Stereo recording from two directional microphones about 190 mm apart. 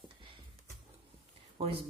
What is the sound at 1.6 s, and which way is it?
Speech, 30° right (ahead or behind).